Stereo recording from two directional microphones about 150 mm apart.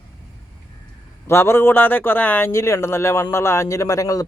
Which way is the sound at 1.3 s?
15° left (ahead or behind).